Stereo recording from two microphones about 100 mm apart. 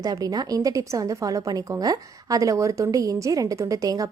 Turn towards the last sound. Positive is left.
turn(degrees=-35)  # may be behind; listen again after turning